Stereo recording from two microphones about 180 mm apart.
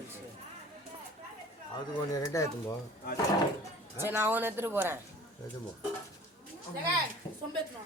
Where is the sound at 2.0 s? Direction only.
20° left (ahead or behind).